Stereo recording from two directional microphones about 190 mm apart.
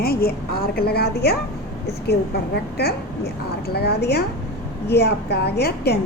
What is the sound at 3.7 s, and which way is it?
A woman's voice, 60° left (ahead or behind).